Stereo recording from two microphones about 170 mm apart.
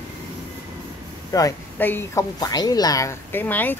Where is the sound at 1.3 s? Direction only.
15° left (ahead or behind).